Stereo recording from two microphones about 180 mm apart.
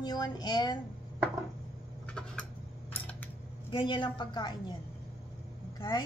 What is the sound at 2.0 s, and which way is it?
Tick-tock, 5° left (ahead or behind).